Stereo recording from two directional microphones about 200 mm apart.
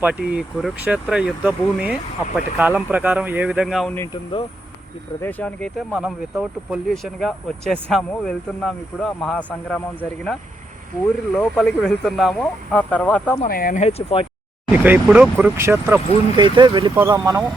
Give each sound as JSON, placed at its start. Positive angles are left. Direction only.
{"t": 0.0, "sound": "speech", "side_deg": -5}
{"t": 3.9, "sound": "speech", "side_deg": 15}
{"t": 5.2, "sound": "speech", "side_deg": 5}
{"t": 13.4, "sound": "speech", "side_deg": 45}
{"t": 14.7, "sound": "speech", "side_deg": -10}
{"t": 16.4, "sound": "speech", "side_deg": -20}
{"t": 16.9, "sound": "speech", "side_deg": -10}